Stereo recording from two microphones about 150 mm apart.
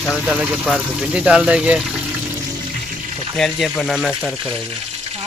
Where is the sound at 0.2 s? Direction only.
10° right (ahead or behind).